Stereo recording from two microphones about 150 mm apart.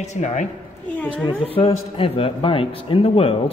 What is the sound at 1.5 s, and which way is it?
A man's voice, 40° left (ahead or behind).